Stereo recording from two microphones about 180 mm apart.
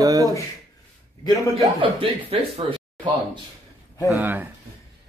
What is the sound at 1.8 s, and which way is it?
Speech, 30° right (ahead or behind).